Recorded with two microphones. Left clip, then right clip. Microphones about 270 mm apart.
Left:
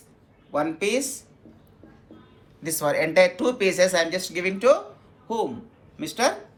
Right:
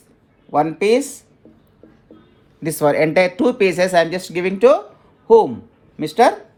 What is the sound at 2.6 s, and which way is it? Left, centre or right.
Speech, right.